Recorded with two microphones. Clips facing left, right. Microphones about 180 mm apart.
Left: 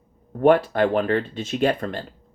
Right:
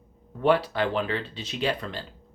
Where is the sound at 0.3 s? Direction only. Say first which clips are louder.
Left 6 dB; 50° left (ahead or behind).